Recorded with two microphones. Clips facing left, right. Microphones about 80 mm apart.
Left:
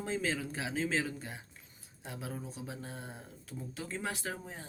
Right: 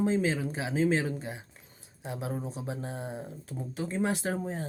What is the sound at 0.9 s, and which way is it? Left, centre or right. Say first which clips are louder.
Speech: right 6 dB; right.